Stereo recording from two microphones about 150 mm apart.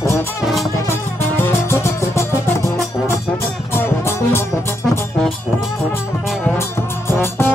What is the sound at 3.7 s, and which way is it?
Music, 15° left (ahead or behind).